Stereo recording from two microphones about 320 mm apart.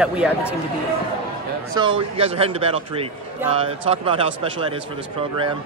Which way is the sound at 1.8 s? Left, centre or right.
Centre.